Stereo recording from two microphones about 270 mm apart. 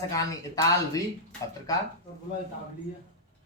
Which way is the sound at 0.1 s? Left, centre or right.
Centre.